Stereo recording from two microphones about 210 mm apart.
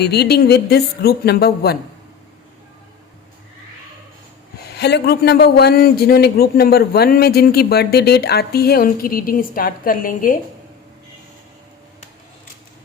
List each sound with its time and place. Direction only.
0.0 s a man's voice: 50° left (ahead or behind)
4.8 s a man's voice: 50° left (ahead or behind)